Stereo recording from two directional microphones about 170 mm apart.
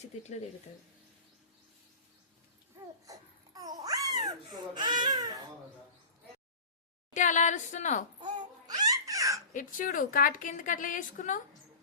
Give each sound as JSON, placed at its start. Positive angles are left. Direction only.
{"t": 3.1, "sound": "babbling", "side_deg": -20}
{"t": 7.1, "sound": "a woman's voice", "side_deg": 45}
{"t": 8.2, "sound": "babbling", "side_deg": -25}
{"t": 9.5, "sound": "a woman's voice", "side_deg": 50}